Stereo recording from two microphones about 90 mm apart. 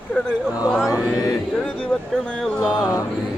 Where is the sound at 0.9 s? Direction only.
40° left (ahead or behind).